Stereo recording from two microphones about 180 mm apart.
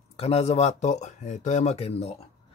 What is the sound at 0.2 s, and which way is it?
Speech, 35° left (ahead or behind).